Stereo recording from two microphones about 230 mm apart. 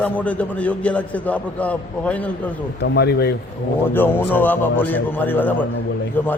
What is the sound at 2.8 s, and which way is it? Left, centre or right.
Speech, left.